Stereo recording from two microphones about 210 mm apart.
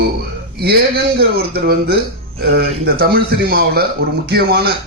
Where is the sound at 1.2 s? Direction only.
50° right (ahead or behind).